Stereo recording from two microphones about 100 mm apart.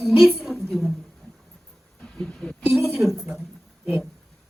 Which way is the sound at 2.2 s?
10° left (ahead or behind).